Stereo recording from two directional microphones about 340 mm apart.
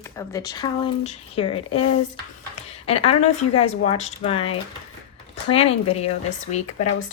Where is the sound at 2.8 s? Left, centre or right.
Centre.